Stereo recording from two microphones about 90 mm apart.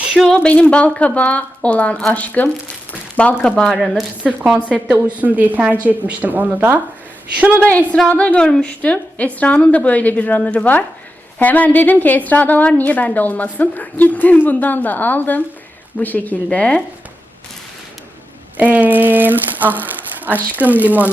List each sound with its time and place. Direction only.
0.3 s a woman's voice: 15° left (ahead or behind)
3.6 s speech: centre (ahead or behind)
4.2 s a woman's voice: 15° right (ahead or behind)
7.5 s a woman's voice: 15° left (ahead or behind)
18.5 s speech: 20° right (ahead or behind)